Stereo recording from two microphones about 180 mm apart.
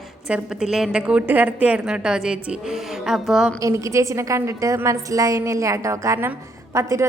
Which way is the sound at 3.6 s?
15° right (ahead or behind).